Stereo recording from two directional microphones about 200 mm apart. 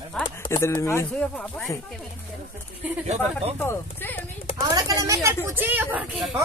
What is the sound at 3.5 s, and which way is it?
Speech, 10° left (ahead or behind).